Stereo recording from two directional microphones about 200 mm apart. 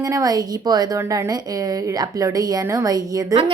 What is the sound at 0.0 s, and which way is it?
A woman's voice, 15° right (ahead or behind).